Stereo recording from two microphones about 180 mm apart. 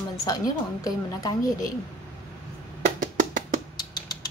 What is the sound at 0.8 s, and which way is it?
Speech, 20° left (ahead or behind).